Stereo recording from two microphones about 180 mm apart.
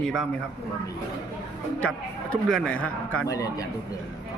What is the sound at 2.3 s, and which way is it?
Speech, 5° left (ahead or behind).